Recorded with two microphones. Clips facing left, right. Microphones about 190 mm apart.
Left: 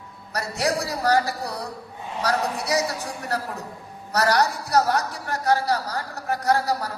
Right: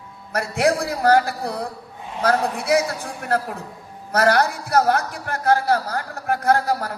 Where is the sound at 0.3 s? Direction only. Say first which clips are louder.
Right 5 dB; 55° right (ahead or behind).